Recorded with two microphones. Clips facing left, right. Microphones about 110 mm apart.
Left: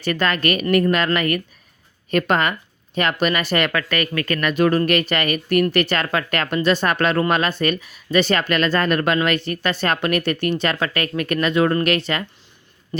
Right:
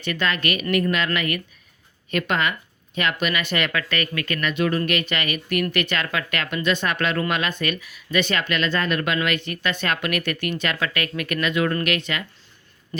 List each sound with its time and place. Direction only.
0.0 s speech: 45° left (ahead or behind)